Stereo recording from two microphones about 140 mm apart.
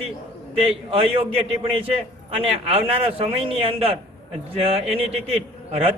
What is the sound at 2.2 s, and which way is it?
A man's voice, 45° right (ahead or behind).